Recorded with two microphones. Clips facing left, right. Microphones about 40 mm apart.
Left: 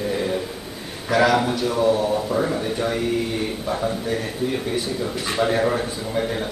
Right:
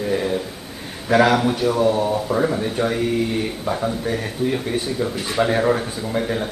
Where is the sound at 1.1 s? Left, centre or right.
Right.